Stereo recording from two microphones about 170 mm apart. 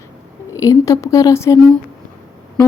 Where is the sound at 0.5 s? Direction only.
20° left (ahead or behind).